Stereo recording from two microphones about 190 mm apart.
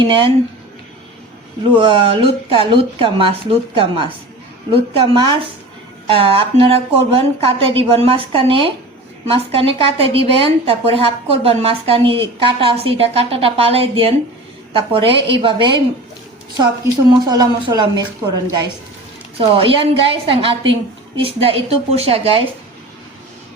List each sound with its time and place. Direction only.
0.0 s speech: 25° right (ahead or behind)
1.7 s a woman's voice: 25° right (ahead or behind)
17.1 s a woman's voice: 20° right (ahead or behind)
19.4 s a woman's voice: 30° right (ahead or behind)